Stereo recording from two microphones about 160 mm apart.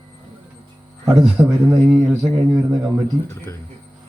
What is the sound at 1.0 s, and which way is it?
A man's voice, centre (ahead or behind).